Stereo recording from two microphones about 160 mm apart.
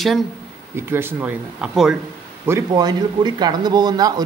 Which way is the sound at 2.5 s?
20° right (ahead or behind).